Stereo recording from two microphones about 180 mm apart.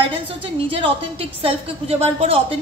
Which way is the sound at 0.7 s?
30° right (ahead or behind).